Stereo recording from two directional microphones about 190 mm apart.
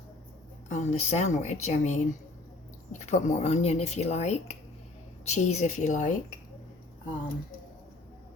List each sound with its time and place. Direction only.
0.7 s speech: 35° left (ahead or behind)